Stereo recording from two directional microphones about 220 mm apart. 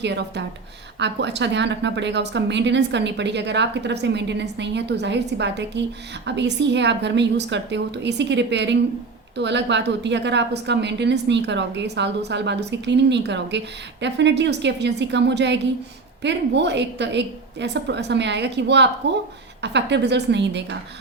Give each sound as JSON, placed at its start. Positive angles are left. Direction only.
{"t": 0.0, "sound": "a woman's voice", "side_deg": -50}